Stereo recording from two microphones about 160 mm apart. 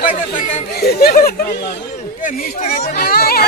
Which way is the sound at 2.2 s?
60° left (ahead or behind).